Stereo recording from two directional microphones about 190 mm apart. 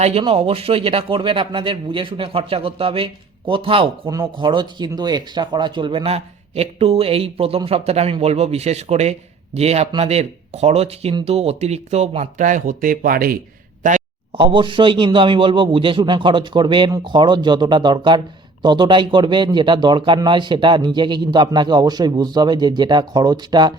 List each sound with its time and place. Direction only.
0.0 s a man's voice: 30° right (ahead or behind)
14.3 s a man's voice: 25° right (ahead or behind)